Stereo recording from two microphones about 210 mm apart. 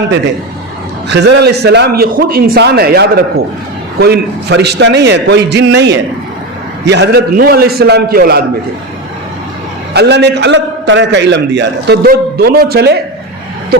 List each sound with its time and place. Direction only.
1.0 s a man's voice: 55° right (ahead or behind)
9.9 s a man's voice: 55° right (ahead or behind)